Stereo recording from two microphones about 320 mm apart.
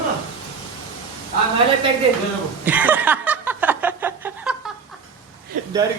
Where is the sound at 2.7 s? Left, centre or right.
Centre.